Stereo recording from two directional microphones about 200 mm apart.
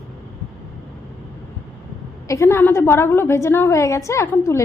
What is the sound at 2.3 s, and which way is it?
A woman's voice, 15° left (ahead or behind).